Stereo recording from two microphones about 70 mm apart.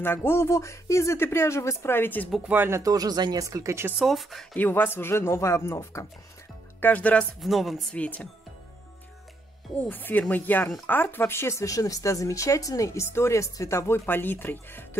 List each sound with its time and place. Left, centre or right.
0.0 s speech: left
2.8 s speech: right
3.4 s speech: right
4.0 s speech: centre
4.6 s speech: left
6.8 s speech: left
7.3 s speech: centre
7.9 s speech: centre
9.8 s speech: left